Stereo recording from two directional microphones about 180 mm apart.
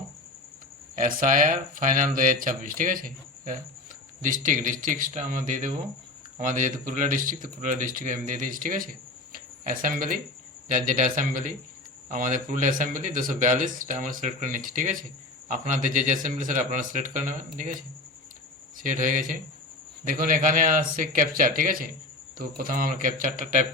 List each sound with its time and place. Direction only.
0.9 s speech: 50° right (ahead or behind)
18.8 s speech: 45° right (ahead or behind)